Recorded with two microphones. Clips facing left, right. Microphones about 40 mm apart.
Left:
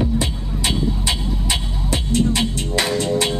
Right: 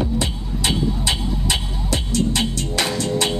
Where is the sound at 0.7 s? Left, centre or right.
Right.